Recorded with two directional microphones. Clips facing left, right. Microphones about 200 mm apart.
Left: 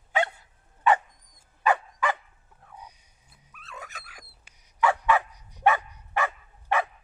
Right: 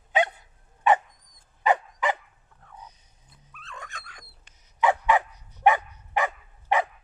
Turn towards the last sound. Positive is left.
turn(degrees=-15)  # may be behind; listen again after turning